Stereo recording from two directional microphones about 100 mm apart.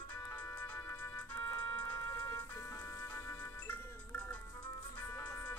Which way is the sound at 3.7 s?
15° left (ahead or behind).